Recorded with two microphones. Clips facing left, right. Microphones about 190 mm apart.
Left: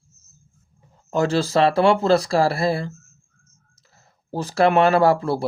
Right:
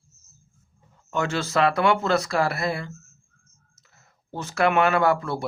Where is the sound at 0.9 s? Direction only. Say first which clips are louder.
Left 6 dB; 35° left (ahead or behind).